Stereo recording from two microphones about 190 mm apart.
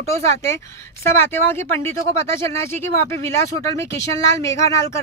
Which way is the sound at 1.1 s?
10° left (ahead or behind).